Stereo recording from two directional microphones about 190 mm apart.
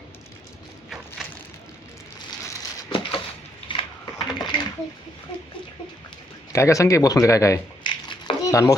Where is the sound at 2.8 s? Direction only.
25° left (ahead or behind).